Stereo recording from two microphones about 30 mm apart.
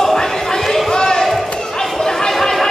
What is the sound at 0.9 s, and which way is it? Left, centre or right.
Basketball bounce, left.